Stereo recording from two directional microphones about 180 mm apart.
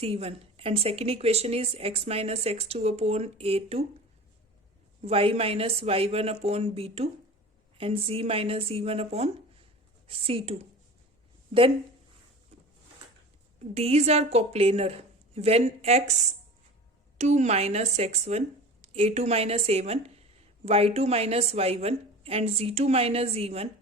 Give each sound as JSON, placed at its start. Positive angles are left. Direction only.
{"t": 0.0, "sound": "a woman's voice", "side_deg": -35}
{"t": 5.0, "sound": "a woman's voice", "side_deg": -30}
{"t": 13.7, "sound": "a woman's voice", "side_deg": -35}